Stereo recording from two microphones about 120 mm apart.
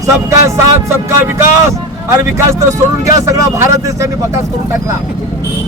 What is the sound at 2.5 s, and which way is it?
Speech, 25° right (ahead or behind).